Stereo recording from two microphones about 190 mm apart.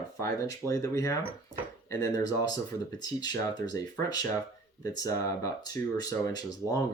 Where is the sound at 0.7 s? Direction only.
15° left (ahead or behind).